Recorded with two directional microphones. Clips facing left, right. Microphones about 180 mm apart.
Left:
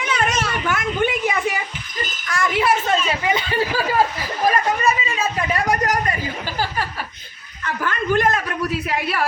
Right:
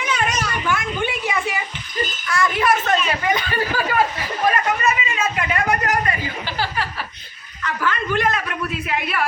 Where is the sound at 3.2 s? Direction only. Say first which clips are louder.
Left 1 dB; 20° left (ahead or behind).